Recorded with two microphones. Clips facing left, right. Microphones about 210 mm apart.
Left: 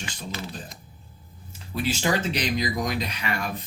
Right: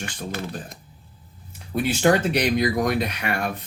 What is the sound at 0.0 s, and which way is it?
Speech, 55° right (ahead or behind).